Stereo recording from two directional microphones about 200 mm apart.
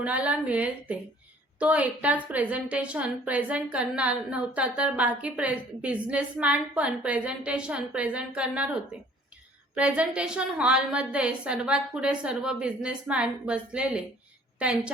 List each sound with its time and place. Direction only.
0.0 s a woman's voice: 5° right (ahead or behind)